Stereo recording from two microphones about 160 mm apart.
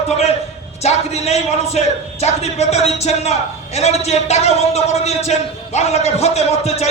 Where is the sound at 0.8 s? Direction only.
40° left (ahead or behind).